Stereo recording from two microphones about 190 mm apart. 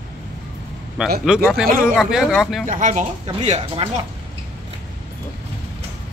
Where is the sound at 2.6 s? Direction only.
40° right (ahead or behind).